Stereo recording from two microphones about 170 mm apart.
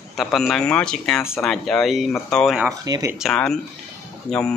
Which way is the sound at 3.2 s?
5° left (ahead or behind).